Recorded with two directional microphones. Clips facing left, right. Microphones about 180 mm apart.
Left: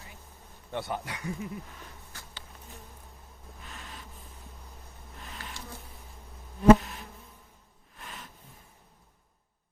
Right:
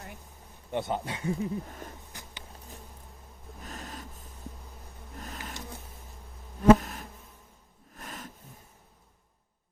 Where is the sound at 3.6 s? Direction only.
40° right (ahead or behind).